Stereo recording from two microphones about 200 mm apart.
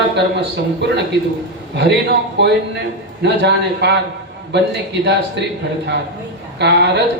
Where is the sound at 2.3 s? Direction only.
60° right (ahead or behind).